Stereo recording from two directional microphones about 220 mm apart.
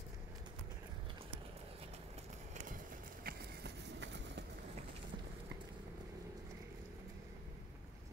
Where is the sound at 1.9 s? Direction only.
30° right (ahead or behind); by 4.5 s 50° right (ahead or behind).